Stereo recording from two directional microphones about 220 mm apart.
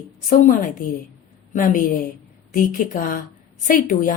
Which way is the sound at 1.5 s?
35° left (ahead or behind).